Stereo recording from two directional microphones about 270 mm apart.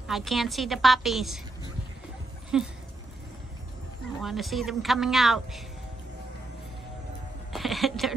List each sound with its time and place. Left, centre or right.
0.0 s a woman's voice: centre
2.5 s a woman's voice: centre
4.2 s a woman's voice: centre
7.5 s a sound: centre